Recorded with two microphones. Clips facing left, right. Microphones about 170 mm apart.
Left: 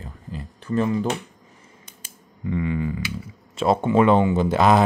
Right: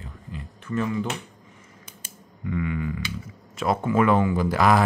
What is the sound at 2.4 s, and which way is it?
Speech, 30° left (ahead or behind).